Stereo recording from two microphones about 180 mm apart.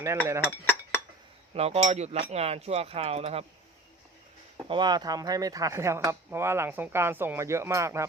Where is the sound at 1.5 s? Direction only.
35° right (ahead or behind).